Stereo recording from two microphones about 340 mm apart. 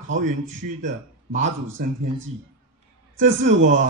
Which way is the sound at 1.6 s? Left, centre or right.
Right.